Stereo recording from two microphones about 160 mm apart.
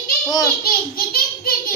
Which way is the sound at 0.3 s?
20° left (ahead or behind).